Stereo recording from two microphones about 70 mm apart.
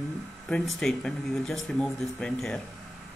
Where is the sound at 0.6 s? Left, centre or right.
Centre.